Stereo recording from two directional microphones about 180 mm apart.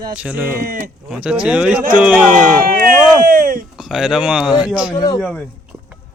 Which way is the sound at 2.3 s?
50° right (ahead or behind).